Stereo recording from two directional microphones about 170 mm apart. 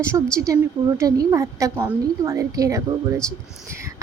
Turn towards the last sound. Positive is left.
turn(degrees=-20)  # may be behind; listen again after turning